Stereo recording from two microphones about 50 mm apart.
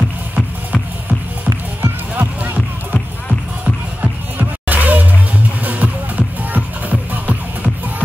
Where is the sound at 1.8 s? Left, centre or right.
Right.